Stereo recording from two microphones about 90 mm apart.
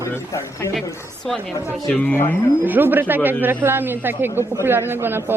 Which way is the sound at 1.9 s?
15° left (ahead or behind).